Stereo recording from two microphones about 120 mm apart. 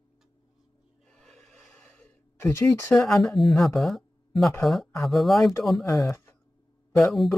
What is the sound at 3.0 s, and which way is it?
Speech, 5° left (ahead or behind).